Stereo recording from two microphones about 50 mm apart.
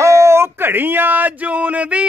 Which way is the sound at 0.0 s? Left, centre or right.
Right.